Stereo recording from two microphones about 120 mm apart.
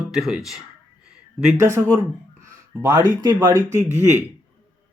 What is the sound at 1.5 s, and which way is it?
Speech, 20° right (ahead or behind).